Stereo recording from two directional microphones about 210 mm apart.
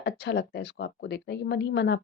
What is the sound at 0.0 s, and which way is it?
A woman's voice, 55° left (ahead or behind).